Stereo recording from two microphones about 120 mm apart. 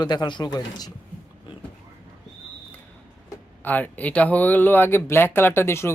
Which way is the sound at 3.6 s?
15° left (ahead or behind).